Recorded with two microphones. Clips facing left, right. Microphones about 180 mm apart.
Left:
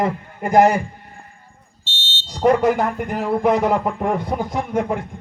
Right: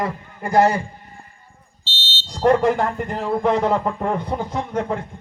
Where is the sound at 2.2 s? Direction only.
5° left (ahead or behind).